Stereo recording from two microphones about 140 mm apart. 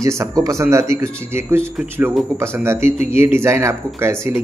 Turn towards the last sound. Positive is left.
turn(degrees=-20)  # may be behind; listen again after turning